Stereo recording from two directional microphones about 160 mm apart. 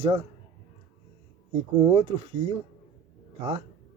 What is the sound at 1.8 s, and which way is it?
Speech, 35° right (ahead or behind).